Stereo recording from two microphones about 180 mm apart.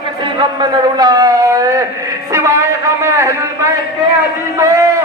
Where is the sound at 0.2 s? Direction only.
25° right (ahead or behind).